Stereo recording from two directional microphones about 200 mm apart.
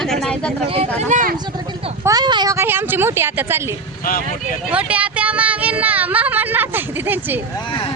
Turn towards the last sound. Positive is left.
turn(degrees=-10)  # may be behind; listen again after turning